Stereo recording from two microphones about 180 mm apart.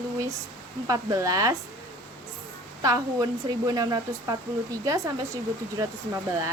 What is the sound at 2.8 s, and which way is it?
Speech, 20° right (ahead or behind).